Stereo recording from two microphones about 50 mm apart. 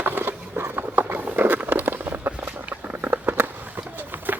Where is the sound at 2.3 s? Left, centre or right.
Right.